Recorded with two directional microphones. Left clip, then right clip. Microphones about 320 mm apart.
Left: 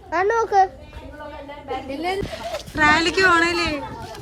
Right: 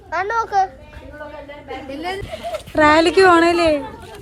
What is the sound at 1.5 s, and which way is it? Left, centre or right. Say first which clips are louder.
Speech: left 1 dB; centre.